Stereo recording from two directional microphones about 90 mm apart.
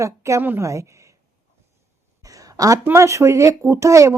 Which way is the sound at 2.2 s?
40° right (ahead or behind).